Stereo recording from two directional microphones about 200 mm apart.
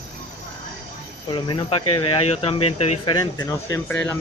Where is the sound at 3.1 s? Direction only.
15° left (ahead or behind).